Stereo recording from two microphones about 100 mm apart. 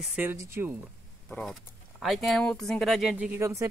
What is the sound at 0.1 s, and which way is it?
Speech, 20° right (ahead or behind).